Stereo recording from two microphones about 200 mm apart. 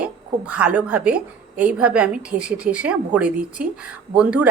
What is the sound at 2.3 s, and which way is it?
Speech, 40° right (ahead or behind).